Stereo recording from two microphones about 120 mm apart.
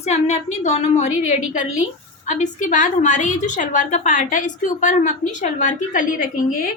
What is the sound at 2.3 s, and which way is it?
A woman's voice, 90° left.